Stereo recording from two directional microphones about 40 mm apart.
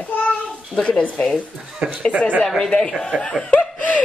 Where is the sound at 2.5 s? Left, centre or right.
Centre; by 4.0 s left.